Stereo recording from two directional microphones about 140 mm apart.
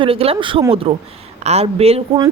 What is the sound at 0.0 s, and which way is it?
Speech, 40° right (ahead or behind).